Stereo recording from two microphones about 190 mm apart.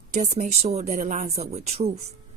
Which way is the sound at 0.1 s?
40° right (ahead or behind).